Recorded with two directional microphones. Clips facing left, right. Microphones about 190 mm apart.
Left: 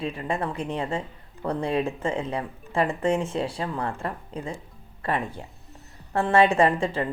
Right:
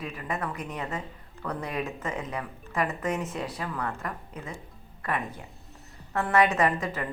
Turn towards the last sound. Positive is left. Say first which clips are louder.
# left 5 dB
turn(degrees=30)  # may be behind; listen again after turning